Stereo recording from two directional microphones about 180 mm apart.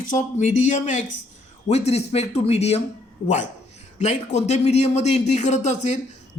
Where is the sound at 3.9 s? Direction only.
40° left (ahead or behind).